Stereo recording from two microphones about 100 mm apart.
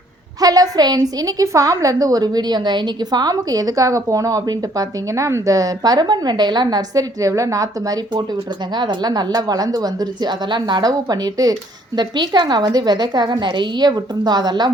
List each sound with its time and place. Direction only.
0.3 s a woman's voice: 40° right (ahead or behind)
8.7 s a woman's voice: 45° right (ahead or behind)